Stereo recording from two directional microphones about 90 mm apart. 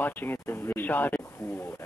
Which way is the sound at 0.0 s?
25° left (ahead or behind).